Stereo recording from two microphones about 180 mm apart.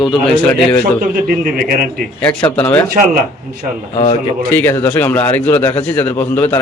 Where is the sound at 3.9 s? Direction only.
35° left (ahead or behind).